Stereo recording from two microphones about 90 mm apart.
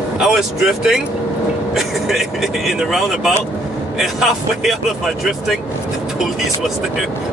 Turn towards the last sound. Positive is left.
turn(degrees=0)  # may be behind; listen again after turning